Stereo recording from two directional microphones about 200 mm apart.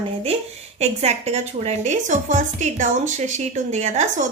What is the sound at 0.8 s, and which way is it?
A woman's voice, 35° right (ahead or behind).